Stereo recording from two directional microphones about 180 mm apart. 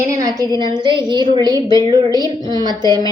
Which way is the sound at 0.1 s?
20° right (ahead or behind).